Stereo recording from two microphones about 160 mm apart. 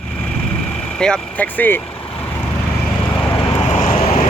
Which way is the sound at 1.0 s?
5° left (ahead or behind).